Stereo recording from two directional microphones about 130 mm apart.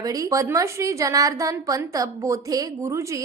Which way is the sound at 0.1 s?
25° right (ahead or behind).